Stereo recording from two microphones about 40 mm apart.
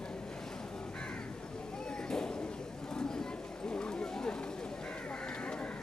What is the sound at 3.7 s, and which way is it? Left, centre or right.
Clip-clop, left.